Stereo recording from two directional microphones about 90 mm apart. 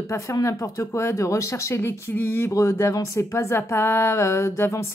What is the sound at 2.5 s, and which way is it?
Speech, 35° left (ahead or behind).